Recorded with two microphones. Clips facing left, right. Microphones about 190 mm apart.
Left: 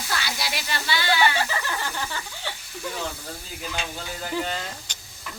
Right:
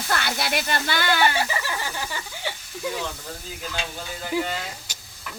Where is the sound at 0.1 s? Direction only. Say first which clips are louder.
Right 5 dB; 55° right (ahead or behind).